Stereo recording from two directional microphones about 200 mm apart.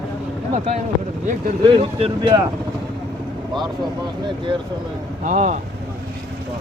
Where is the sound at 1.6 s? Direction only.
25° right (ahead or behind).